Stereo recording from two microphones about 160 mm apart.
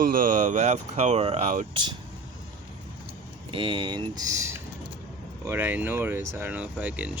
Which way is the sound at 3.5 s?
30° right (ahead or behind).